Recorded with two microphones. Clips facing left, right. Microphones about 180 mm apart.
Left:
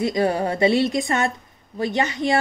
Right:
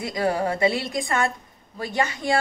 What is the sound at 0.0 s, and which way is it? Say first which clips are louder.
A man's voice: left 3 dB; 25° left (ahead or behind).